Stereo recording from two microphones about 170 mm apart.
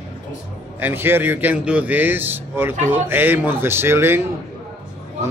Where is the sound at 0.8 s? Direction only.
10° right (ahead or behind).